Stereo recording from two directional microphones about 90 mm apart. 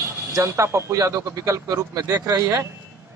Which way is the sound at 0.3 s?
35° right (ahead or behind).